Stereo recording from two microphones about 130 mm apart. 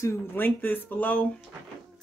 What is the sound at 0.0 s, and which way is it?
Speech, 20° left (ahead or behind).